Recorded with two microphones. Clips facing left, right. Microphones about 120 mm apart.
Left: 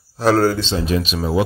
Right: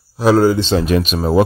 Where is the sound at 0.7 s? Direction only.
60° right (ahead or behind); by 1.4 s 45° right (ahead or behind).